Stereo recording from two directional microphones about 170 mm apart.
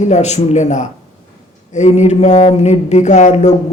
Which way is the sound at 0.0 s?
40° left (ahead or behind).